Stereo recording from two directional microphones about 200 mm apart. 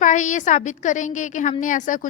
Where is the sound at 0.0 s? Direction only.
40° left (ahead or behind).